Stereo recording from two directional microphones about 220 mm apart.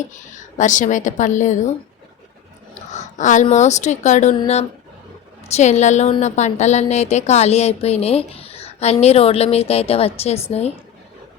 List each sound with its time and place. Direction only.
0.1 s speech: 35° left (ahead or behind)
2.7 s a sound: 35° left (ahead or behind)
3.4 s a woman's voice: 30° left (ahead or behind)